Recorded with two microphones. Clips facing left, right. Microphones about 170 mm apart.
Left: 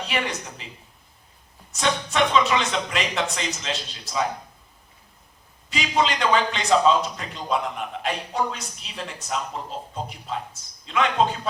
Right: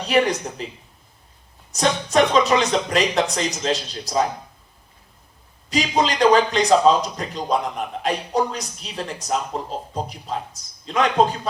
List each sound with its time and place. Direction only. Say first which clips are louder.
0.0 s a man's voice: right 9 dB; 40° right (ahead or behind)
1.7 s a man's voice: right 6 dB; 40° right (ahead or behind)
5.7 s a man's voice: right 3 dB; 40° right (ahead or behind)